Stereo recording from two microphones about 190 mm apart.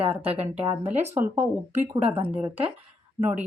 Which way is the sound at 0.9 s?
35° right (ahead or behind).